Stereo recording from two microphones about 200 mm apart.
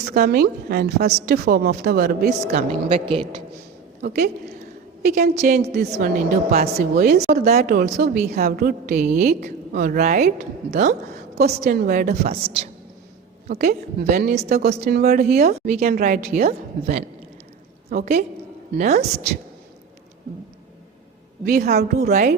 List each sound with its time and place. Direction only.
0.0 s a woman's voice: 50° right (ahead or behind)
2.6 s a woman's voice: 25° right (ahead or behind)
4.0 s a woman's voice: 50° right (ahead or behind)
10.7 s a woman's voice: 35° right (ahead or behind)
11.1 s a sound: 50° right (ahead or behind)
11.6 s a woman's voice: 50° right (ahead or behind); by 12.6 s 35° right (ahead or behind)
13.5 s a woman's voice: 50° right (ahead or behind)
18.0 s a woman's voice: 35° right (ahead or behind)
21.4 s a woman's voice: 50° right (ahead or behind)